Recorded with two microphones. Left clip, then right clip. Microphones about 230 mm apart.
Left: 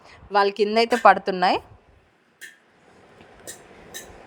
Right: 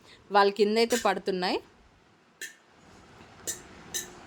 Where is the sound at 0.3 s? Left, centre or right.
Centre.